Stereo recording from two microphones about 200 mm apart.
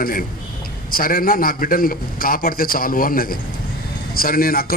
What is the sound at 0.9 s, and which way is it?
A man's voice, 45° left (ahead or behind).